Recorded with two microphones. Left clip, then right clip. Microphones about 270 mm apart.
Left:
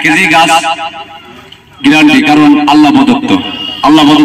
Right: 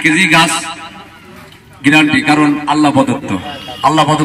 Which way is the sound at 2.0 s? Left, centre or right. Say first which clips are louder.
Left 8 dB; left.